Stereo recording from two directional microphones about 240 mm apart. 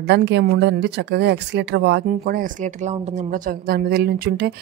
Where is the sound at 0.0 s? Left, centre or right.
Right.